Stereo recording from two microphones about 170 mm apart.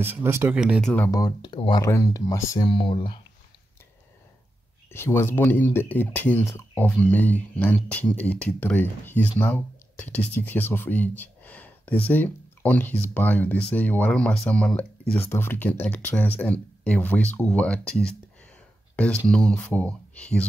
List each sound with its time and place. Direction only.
0.0 s speech: 15° right (ahead or behind)
0.6 s speech: centre (ahead or behind)
1.1 s speech: 25° left (ahead or behind)
4.9 s speech: 15° left (ahead or behind)
19.2 s speech: 5° left (ahead or behind)